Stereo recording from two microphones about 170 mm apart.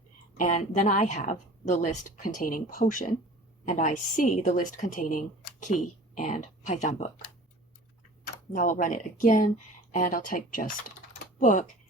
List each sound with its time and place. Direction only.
0.3 s speech: 50° left (ahead or behind)
8.5 s speech: 50° left (ahead or behind)